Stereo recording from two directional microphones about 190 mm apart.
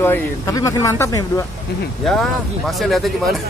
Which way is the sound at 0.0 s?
15° left (ahead or behind).